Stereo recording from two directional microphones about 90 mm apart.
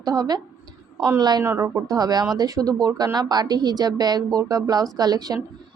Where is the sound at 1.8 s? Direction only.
45° right (ahead or behind).